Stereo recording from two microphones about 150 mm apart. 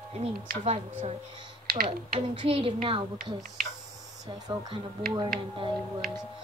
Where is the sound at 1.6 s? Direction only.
85° right.